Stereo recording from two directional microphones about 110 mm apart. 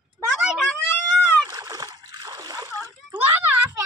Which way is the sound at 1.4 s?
35° right (ahead or behind).